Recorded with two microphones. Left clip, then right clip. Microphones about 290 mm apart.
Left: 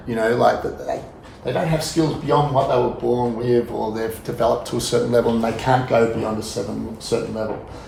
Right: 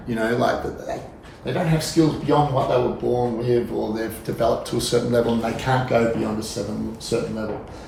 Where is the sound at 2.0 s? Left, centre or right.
Centre.